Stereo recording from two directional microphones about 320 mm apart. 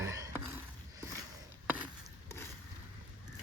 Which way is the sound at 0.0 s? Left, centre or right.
Centre.